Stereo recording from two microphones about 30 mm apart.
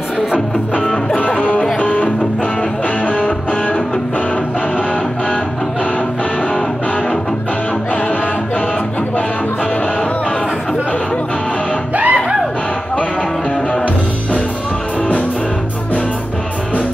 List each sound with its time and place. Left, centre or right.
1.4 s music: left
3.1 s music: left
11.9 s music: right